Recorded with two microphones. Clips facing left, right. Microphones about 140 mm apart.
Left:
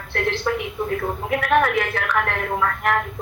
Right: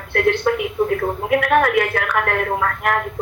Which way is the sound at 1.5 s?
45° right (ahead or behind).